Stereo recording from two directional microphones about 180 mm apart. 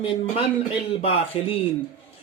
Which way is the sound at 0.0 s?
30° left (ahead or behind).